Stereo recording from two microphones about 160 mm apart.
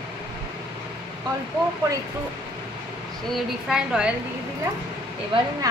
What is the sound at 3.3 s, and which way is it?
Speech, 5° right (ahead or behind).